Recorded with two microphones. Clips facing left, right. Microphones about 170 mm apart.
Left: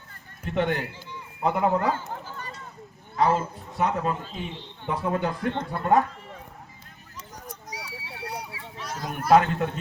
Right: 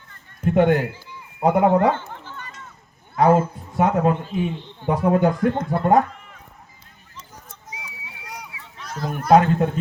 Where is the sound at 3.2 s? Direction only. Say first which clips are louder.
Right 7 dB; 50° right (ahead or behind).